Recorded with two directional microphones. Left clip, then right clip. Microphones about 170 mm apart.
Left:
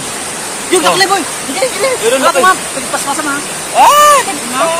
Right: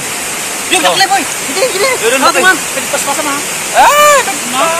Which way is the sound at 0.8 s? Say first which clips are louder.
Even; 20° right (ahead or behind).